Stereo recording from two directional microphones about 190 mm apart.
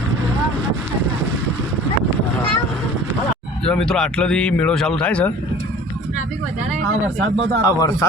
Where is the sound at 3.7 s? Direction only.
5° left (ahead or behind).